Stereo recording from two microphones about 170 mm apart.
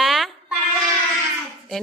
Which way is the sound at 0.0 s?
Centre (ahead or behind).